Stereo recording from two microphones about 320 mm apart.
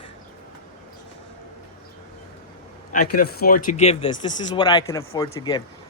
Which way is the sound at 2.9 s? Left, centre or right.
Left.